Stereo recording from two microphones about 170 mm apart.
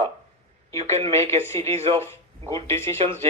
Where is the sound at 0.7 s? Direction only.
15° left (ahead or behind).